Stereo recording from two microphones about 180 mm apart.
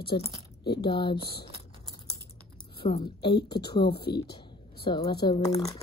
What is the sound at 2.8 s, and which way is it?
A woman's voice, 25° left (ahead or behind).